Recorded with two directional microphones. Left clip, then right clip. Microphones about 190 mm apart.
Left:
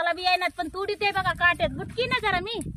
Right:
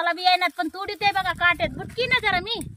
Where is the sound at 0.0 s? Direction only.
Centre (ahead or behind).